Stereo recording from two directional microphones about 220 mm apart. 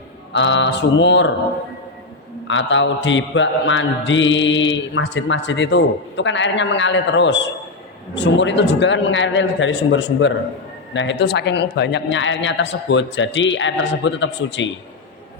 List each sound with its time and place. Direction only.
0.3 s mantra: 55° left (ahead or behind)
2.5 s mantra: 60° left (ahead or behind)